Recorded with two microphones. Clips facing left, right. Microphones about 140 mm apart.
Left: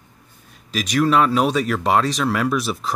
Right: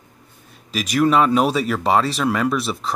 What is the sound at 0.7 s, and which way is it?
Speech, 5° right (ahead or behind).